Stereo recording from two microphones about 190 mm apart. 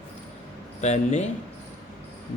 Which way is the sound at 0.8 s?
35° left (ahead or behind).